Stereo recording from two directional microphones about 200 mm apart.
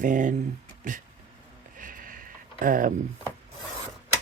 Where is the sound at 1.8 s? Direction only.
45° right (ahead or behind).